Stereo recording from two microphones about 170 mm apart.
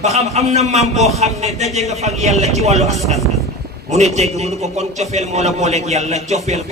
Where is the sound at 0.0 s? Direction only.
40° right (ahead or behind).